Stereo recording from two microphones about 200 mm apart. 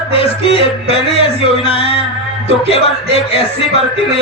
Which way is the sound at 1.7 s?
25° left (ahead or behind).